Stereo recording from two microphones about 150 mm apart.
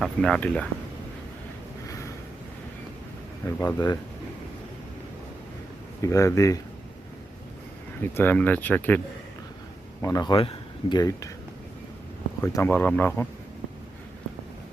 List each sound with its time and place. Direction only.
0.0 s speech: 5° left (ahead or behind)
3.4 s speech: 20° left (ahead or behind)
6.0 s speech: 20° left (ahead or behind)
8.1 s speech: 15° left (ahead or behind)
10.0 s speech: 25° left (ahead or behind)
12.4 s speech: 15° left (ahead or behind)